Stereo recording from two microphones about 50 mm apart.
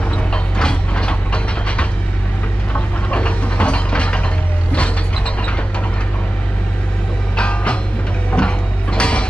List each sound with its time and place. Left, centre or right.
0.6 s mechanisms: centre
2.7 s wood: left
4.7 s mechanisms: left
7.3 s music: left
8.3 s mechanisms: left